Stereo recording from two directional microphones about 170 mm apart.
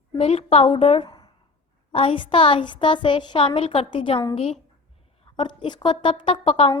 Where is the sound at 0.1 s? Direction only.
35° left (ahead or behind).